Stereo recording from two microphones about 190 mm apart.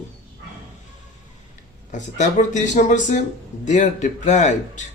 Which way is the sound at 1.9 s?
40° left (ahead or behind).